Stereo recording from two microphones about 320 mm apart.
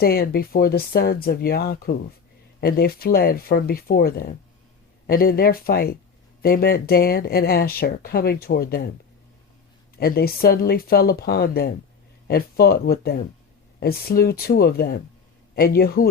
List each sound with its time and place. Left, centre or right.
0.0 s speech: left
10.0 s speech: left